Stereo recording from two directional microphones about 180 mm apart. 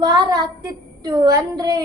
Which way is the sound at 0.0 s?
20° right (ahead or behind).